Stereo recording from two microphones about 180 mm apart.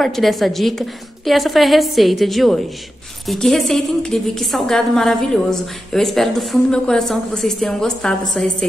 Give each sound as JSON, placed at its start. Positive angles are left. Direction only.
{"t": 0.0, "sound": "a woman's voice", "side_deg": 0}